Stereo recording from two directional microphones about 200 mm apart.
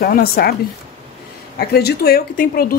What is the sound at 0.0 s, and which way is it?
Speech, 50° left (ahead or behind).